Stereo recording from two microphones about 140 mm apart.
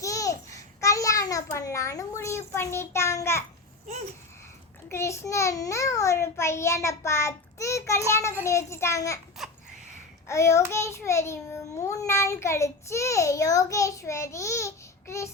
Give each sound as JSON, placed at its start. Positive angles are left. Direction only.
{"t": 0.0, "sound": "a sound", "side_deg": 25}
{"t": 4.9, "sound": "a child's voice", "side_deg": 20}
{"t": 10.2, "sound": "a child's voice", "side_deg": 20}